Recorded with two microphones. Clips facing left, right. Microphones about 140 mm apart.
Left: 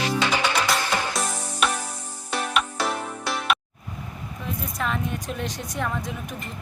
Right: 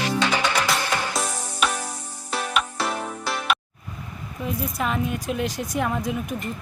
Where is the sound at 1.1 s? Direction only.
Centre (ahead or behind).